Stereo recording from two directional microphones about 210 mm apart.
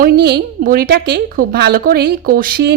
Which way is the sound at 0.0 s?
45° right (ahead or behind).